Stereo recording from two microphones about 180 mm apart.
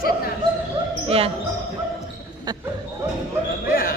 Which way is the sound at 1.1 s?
35° right (ahead or behind).